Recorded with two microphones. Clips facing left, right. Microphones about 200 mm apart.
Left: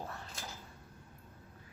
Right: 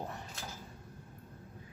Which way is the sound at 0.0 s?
15° right (ahead or behind).